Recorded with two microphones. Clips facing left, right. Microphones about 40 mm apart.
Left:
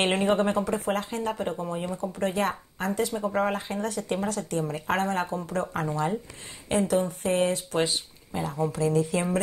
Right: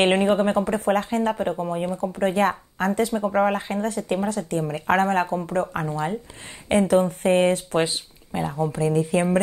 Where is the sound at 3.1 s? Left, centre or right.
Right.